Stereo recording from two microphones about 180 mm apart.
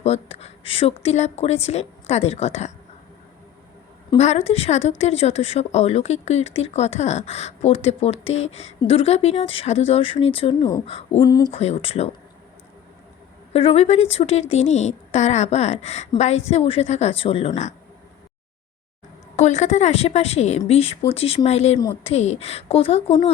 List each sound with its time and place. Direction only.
0.0 s speech: 35° left (ahead or behind)
4.2 s speech: 35° left (ahead or behind)
11.2 s speech: 20° left (ahead or behind)
11.5 s speech: 35° left (ahead or behind)
13.5 s speech: 35° left (ahead or behind)
19.4 s speech: 40° left (ahead or behind)